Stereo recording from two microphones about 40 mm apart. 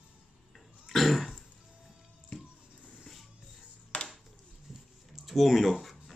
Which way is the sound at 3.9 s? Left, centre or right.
Left.